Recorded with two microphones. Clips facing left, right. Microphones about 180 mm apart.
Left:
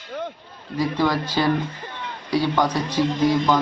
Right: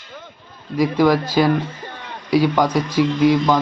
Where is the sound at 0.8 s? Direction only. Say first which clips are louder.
Right 6 dB; 10° right (ahead or behind).